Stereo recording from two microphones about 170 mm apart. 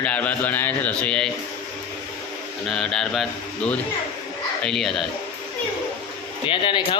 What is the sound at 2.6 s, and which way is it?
Speech, 5° left (ahead or behind).